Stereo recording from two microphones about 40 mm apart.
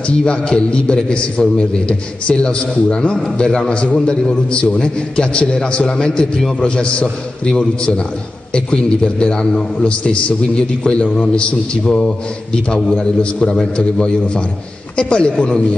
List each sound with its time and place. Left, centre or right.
0.2 s a man's voice: left
15.0 s a man's voice: left
15.3 s speech: centre